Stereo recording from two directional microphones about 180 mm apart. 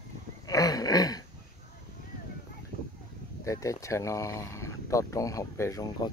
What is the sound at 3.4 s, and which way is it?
Speech, 15° left (ahead or behind).